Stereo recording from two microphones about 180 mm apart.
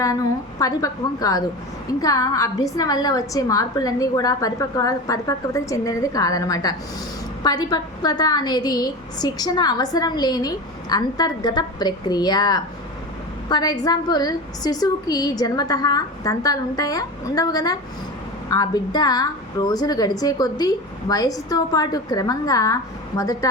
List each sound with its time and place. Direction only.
0.6 s a woman's voice: 20° left (ahead or behind)